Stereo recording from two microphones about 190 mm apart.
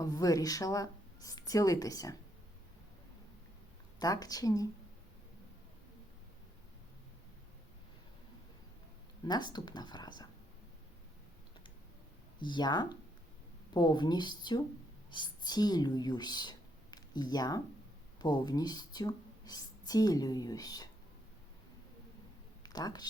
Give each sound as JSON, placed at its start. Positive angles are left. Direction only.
{"t": 0.0, "sound": "speech", "side_deg": 20}
{"t": 4.0, "sound": "speech", "side_deg": 20}
{"t": 9.2, "sound": "speech", "side_deg": 20}
{"t": 12.4, "sound": "speech", "side_deg": 25}
{"t": 22.6, "sound": "a sound", "side_deg": 20}